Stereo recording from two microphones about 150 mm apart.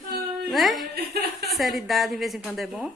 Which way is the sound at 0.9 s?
90° right.